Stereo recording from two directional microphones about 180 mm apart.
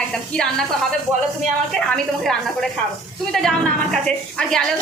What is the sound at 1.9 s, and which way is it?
A woman's voice, 5° left (ahead or behind).